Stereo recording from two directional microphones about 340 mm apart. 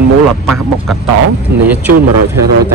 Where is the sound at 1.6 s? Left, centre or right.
Centre.